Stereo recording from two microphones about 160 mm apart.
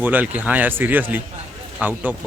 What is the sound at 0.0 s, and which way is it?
Speech, 10° right (ahead or behind).